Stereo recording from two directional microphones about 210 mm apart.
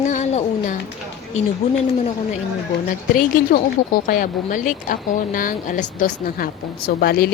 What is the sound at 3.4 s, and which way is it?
Speech, 45° left (ahead or behind).